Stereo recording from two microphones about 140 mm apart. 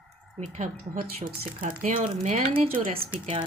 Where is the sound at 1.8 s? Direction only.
65° right (ahead or behind).